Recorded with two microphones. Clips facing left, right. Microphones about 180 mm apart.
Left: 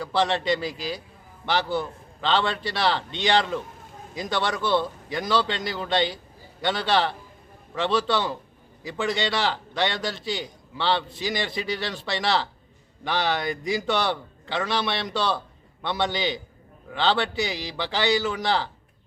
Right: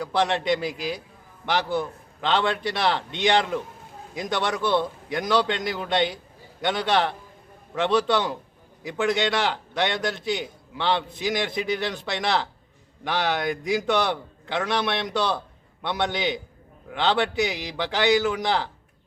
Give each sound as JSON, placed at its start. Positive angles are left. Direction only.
{"t": 0.0, "sound": "a man's voice", "side_deg": -15}